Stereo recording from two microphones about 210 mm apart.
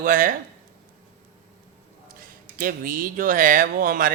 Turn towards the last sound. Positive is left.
turn(degrees=-40)  # may be behind; listen again after turning